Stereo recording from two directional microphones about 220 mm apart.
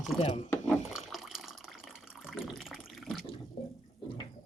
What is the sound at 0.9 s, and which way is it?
Water, centre (ahead or behind).